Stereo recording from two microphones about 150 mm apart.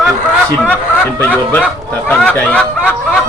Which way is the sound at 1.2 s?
10° left (ahead or behind).